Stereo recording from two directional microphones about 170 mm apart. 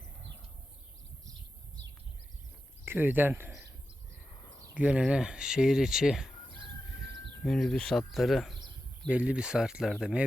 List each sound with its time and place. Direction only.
2.8 s speech: 10° right (ahead or behind)
4.4 s a sound: 20° left (ahead or behind)
4.7 s speech: 5° right (ahead or behind)